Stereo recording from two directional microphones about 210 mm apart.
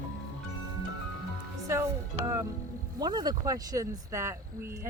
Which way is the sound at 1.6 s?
15° right (ahead or behind).